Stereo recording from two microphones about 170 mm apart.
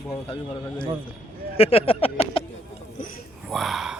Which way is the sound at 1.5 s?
35° left (ahead or behind).